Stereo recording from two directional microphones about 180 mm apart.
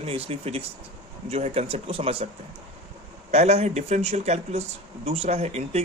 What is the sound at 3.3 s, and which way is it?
Speech, 35° right (ahead or behind).